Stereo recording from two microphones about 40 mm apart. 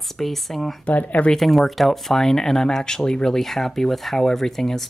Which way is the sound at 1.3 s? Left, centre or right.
Centre.